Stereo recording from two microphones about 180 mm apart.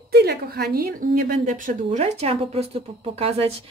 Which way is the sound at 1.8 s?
35° right (ahead or behind).